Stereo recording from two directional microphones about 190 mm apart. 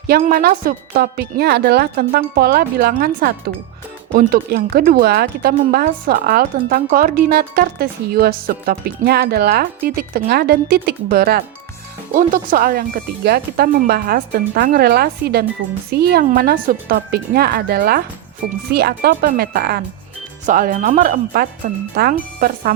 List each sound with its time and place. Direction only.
0.1 s speech: 50° right (ahead or behind)